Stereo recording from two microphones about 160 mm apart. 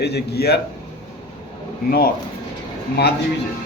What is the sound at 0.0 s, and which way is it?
Speech, 90° left.